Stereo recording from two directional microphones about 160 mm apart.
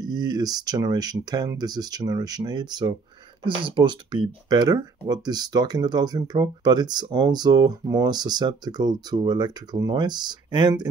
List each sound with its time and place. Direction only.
0.0 s speech: 25° right (ahead or behind)